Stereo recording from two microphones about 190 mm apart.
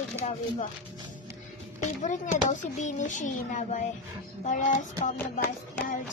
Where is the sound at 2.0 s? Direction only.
40° left (ahead or behind).